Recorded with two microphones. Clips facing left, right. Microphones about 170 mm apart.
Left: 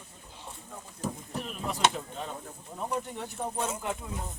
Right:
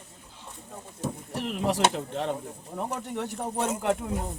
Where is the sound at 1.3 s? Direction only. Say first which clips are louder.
Right 7 dB; 80° right.